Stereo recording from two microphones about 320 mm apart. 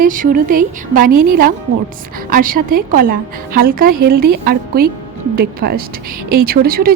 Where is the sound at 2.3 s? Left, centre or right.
Right.